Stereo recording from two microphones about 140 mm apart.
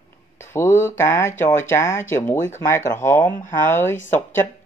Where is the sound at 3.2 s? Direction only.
70° left (ahead or behind).